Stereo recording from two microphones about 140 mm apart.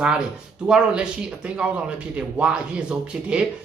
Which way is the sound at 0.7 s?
10° right (ahead or behind).